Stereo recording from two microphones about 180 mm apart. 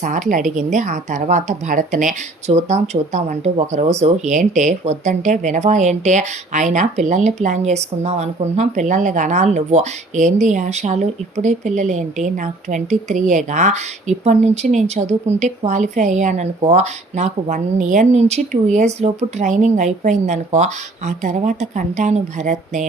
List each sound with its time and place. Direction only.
0.0 s speech: 45° right (ahead or behind)